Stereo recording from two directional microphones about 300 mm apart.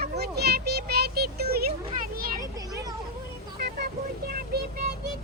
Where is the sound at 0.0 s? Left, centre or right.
Right.